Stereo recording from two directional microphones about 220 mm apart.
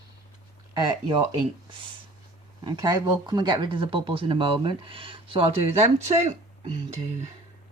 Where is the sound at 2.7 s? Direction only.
20° right (ahead or behind).